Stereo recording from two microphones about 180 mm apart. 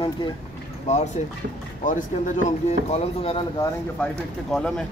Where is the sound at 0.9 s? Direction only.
35° left (ahead or behind).